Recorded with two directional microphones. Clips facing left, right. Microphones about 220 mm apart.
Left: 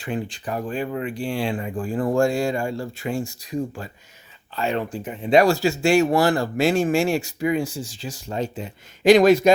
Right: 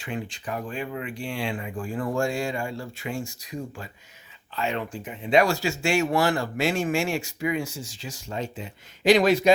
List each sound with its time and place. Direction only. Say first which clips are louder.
0.0 s speech: left 5 dB; 35° left (ahead or behind)